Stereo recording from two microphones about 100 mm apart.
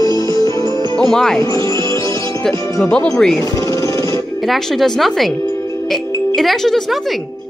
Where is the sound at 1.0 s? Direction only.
5° left (ahead or behind).